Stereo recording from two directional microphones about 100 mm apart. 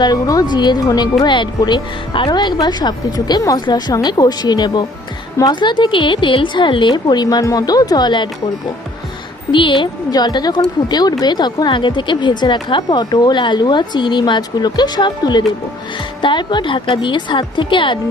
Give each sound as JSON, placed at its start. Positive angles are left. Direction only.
{"t": 0.0, "sound": "a woman's voice", "side_deg": 40}
{"t": 9.5, "sound": "a woman's voice", "side_deg": 55}
{"t": 10.1, "sound": "a woman's voice", "side_deg": 45}